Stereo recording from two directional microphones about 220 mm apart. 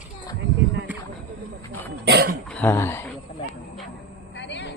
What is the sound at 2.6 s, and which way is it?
Speech, 10° left (ahead or behind).